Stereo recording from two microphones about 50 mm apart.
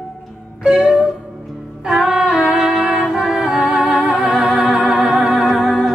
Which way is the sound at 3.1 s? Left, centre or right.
Centre.